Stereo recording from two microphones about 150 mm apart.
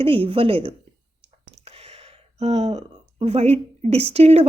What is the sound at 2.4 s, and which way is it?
A woman's voice, 45° right (ahead or behind).